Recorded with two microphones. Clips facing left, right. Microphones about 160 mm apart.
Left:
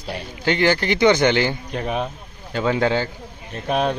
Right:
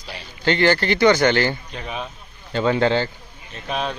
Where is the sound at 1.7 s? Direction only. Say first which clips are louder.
Left 6 dB; 50° left (ahead or behind).